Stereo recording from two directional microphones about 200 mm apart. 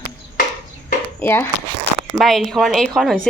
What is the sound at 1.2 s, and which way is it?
Speech, 10° left (ahead or behind).